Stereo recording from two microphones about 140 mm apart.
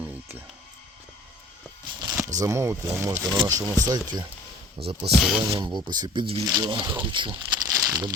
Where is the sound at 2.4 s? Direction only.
20° right (ahead or behind).